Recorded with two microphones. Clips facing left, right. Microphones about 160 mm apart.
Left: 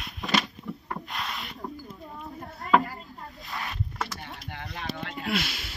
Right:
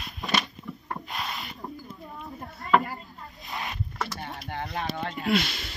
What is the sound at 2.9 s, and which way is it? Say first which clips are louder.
Boat: right 1 dB; 20° right (ahead or behind).